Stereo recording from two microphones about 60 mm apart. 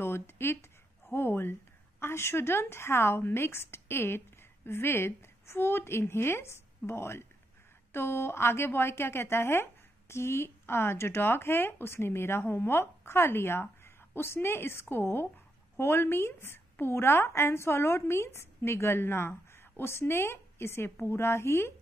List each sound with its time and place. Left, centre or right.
0.0 s speech: left